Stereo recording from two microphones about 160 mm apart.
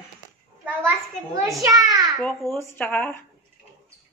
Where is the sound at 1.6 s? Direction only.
20° right (ahead or behind).